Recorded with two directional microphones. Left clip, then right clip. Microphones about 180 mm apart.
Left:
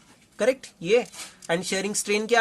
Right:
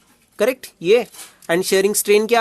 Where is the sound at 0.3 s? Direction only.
40° right (ahead or behind).